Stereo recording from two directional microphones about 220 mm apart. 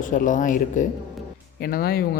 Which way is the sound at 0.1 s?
35° left (ahead or behind).